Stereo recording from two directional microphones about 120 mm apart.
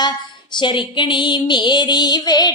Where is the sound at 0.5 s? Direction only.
40° left (ahead or behind).